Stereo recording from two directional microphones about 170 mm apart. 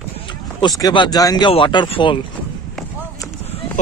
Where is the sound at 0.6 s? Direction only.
20° left (ahead or behind).